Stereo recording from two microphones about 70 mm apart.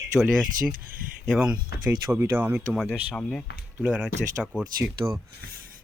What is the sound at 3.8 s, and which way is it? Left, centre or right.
Speech, centre.